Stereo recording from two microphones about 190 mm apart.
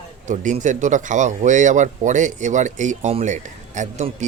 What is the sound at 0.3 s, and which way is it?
Speech, 40° right (ahead or behind).